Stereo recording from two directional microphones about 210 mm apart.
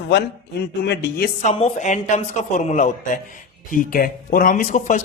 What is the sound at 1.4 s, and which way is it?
Speech, 30° left (ahead or behind).